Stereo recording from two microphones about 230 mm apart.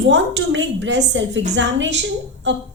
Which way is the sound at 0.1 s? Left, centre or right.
Right.